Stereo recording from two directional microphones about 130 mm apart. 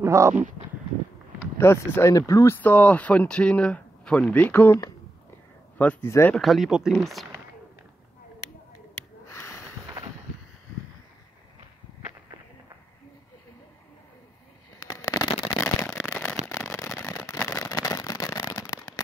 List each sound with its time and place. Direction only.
0.0 s speech: 25° right (ahead or behind)
1.6 s speech: 20° left (ahead or behind)
5.8 s speech: 15° left (ahead or behind)
6.3 s speech: centre (ahead or behind)
9.3 s a sound: 20° left (ahead or behind)
14.8 s a sound: 30° left (ahead or behind)